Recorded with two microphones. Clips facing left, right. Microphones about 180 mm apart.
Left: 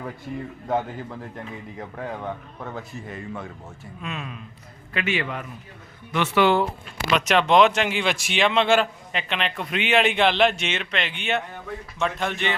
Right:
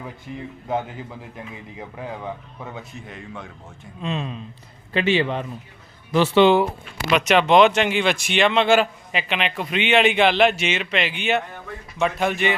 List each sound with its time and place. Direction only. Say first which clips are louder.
0.7 s a man's voice: left 1 dB; centre (ahead or behind)
4.0 s speech: right 7 dB; 30° right (ahead or behind)
7.2 s a man's voice: right 2 dB; centre (ahead or behind)